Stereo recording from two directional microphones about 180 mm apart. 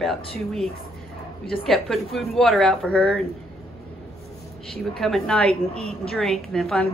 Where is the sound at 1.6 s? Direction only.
Centre (ahead or behind).